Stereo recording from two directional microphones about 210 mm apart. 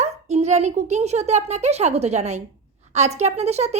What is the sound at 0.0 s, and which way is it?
A woman's voice, 30° right (ahead or behind).